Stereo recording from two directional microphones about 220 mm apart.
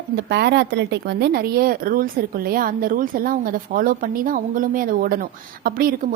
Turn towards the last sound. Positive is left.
turn(degrees=-40)  # may be behind; listen again after turning